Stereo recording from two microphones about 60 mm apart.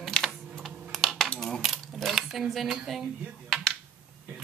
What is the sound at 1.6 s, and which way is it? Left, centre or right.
Speech, centre.